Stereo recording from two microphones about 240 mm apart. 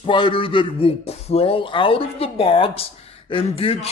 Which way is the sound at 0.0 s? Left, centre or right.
Centre.